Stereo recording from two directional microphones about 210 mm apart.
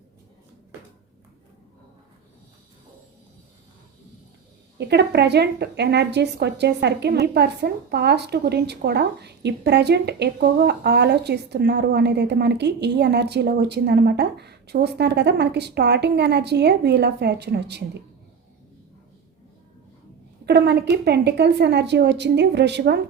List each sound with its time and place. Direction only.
4.8 s a woman's voice: 50° right (ahead or behind)
20.4 s a woman's voice: 50° right (ahead or behind)